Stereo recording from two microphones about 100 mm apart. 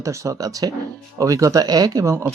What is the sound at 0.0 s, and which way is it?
Speech, 30° right (ahead or behind).